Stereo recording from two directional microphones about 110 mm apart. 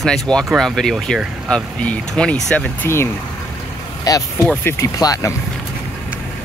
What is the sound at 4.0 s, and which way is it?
Speech, 35° left (ahead or behind).